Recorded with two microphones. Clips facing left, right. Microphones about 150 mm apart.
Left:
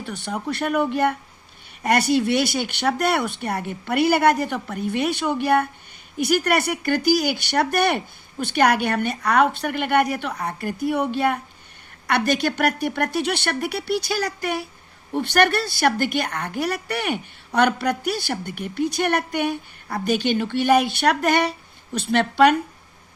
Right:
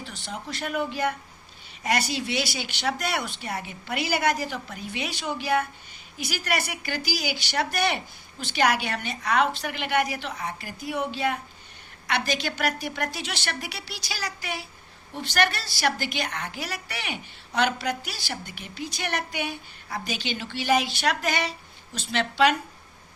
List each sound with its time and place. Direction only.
0.0 s a woman's voice: 55° left (ahead or behind)